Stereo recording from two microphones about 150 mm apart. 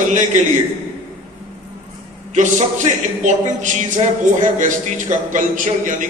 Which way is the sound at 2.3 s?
55° right (ahead or behind).